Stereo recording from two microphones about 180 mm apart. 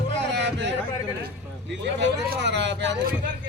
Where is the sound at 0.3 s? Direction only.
75° right (ahead or behind).